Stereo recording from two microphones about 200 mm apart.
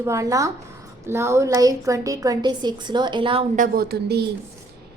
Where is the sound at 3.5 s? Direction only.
45° right (ahead or behind).